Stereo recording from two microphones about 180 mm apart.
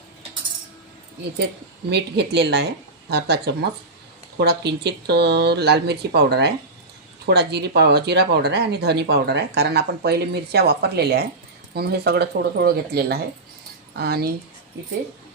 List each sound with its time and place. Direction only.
1.9 s speech: 70° right (ahead or behind)